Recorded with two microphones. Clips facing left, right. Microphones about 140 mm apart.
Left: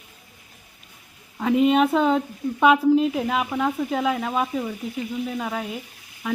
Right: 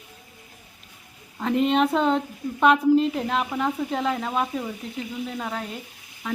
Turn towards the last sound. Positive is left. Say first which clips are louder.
# left 3 dB
turn(degrees=5)  # may be behind; listen again after turning